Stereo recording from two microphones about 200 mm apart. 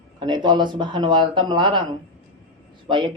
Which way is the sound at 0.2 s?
20° right (ahead or behind).